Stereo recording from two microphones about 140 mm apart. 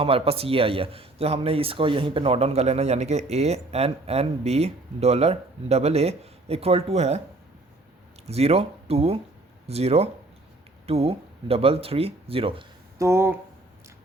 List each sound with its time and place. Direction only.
0.0 s speech: 40° right (ahead or behind)
8.3 s speech: 50° right (ahead or behind)
13.0 s speech: 20° right (ahead or behind)